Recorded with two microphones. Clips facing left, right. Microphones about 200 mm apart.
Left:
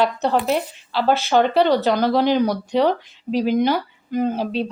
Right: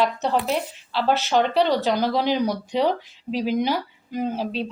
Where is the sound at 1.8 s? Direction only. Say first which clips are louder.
Left 4 dB; 55° left (ahead or behind).